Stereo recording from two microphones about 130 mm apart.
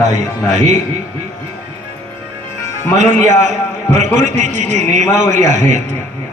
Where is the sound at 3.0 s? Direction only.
65° right (ahead or behind).